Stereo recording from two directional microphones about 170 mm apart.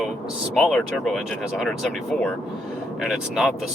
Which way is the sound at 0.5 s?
Centre (ahead or behind).